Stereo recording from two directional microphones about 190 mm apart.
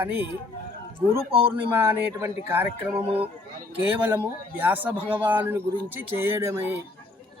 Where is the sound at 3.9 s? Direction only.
10° right (ahead or behind).